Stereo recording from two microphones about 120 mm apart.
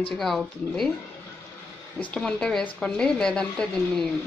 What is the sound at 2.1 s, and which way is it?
A woman's voice, 5° left (ahead or behind).